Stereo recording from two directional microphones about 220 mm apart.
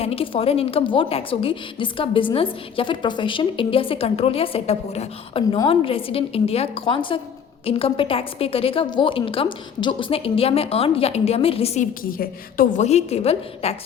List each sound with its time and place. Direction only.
0.0 s a woman's voice: 25° left (ahead or behind)